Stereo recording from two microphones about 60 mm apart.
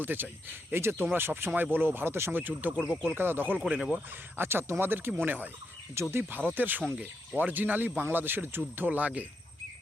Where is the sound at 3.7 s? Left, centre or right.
Centre.